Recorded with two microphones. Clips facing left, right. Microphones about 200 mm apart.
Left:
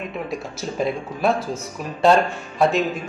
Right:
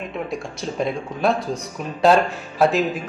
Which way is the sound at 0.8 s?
Centre (ahead or behind).